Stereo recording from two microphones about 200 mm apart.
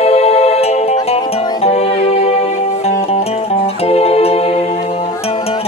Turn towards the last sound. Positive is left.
turn(degrees=30)  # may be behind; listen again after turning